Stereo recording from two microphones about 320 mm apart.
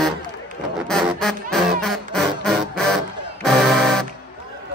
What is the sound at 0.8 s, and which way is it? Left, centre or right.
Music, centre.